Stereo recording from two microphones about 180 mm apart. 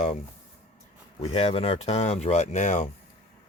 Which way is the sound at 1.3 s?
35° left (ahead or behind).